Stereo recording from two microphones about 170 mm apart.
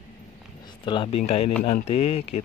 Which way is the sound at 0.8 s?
30° left (ahead or behind).